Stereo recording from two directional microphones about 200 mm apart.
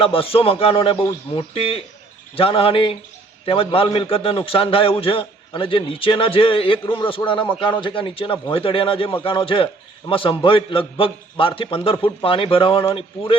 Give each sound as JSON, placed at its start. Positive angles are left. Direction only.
{"t": 0.0, "sound": "a man's voice", "side_deg": 25}